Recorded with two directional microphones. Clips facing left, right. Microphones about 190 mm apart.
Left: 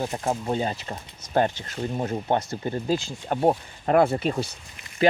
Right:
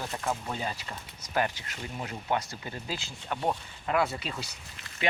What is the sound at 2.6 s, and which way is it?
Speech, 45° left (ahead or behind).